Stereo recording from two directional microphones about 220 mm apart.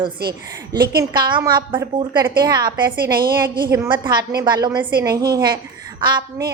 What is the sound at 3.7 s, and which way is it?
Speech, 15° right (ahead or behind).